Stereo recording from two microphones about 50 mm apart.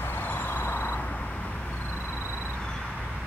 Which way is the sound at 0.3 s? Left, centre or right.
Left.